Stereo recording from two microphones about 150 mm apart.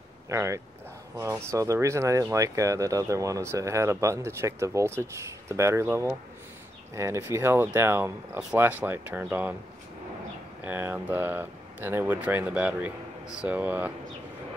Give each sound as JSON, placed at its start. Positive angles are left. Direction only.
{"t": 0.3, "sound": "speech", "side_deg": -20}
{"t": 10.6, "sound": "speech", "side_deg": -15}